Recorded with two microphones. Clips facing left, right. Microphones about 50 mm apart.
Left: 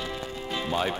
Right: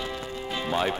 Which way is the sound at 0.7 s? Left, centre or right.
Centre.